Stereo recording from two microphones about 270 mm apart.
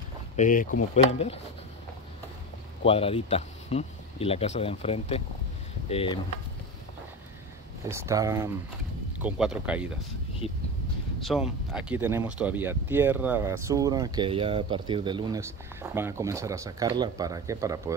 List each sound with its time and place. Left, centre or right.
0.4 s speech: left
2.8 s speech: left
7.8 s speech: centre
11.1 s speech: centre